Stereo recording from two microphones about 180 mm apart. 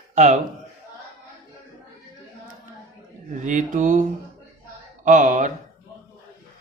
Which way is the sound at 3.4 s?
45° right (ahead or behind).